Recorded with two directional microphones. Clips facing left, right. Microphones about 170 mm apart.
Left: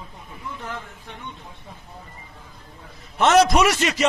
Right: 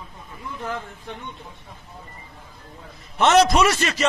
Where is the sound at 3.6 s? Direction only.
15° left (ahead or behind).